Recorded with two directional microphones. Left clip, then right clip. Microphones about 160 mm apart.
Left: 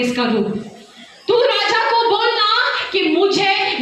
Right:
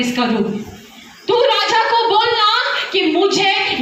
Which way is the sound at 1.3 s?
40° right (ahead or behind).